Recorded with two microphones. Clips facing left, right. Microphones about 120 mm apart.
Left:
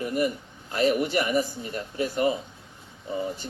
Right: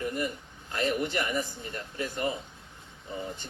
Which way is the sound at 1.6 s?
15° left (ahead or behind).